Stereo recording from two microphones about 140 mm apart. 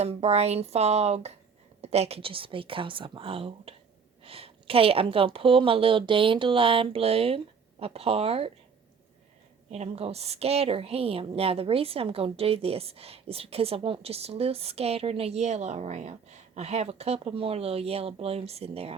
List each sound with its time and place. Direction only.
0.0 s a woman's voice: 50° right (ahead or behind)
9.6 s a woman's voice: 50° right (ahead or behind)